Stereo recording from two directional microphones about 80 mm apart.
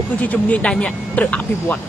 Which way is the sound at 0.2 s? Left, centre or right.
Centre.